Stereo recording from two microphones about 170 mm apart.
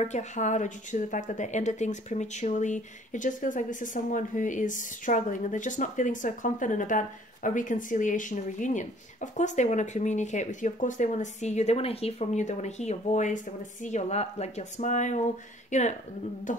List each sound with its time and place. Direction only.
0.0 s a woman's voice: 45° left (ahead or behind)